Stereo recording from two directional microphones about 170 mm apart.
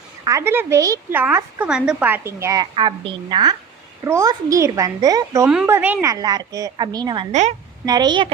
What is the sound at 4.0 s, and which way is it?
A woman's voice, 15° right (ahead or behind).